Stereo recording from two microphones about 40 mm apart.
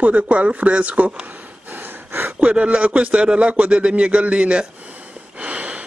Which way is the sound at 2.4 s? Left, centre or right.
Right.